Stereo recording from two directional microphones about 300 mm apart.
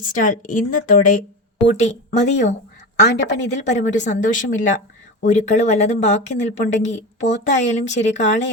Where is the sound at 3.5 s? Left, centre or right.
Left.